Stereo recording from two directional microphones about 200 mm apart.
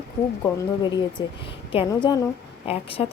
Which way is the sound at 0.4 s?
20° left (ahead or behind).